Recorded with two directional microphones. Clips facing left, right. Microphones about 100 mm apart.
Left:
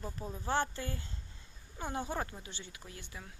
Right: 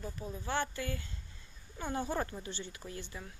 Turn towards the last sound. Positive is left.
turn(degrees=5)  # may be behind; listen again after turning